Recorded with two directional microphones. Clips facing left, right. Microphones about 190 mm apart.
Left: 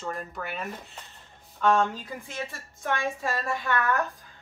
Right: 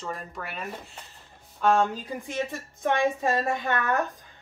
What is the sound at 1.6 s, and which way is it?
A woman's voice, 10° right (ahead or behind).